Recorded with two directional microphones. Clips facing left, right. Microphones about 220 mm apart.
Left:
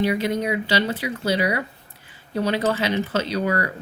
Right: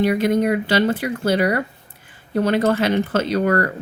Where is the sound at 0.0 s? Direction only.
50° right (ahead or behind).